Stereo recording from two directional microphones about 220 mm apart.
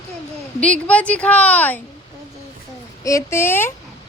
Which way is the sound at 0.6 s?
5° left (ahead or behind).